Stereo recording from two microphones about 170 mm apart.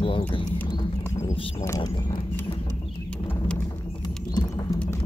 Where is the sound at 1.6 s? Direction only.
20° left (ahead or behind).